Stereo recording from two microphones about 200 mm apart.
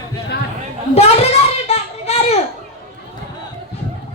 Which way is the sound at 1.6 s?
30° left (ahead or behind).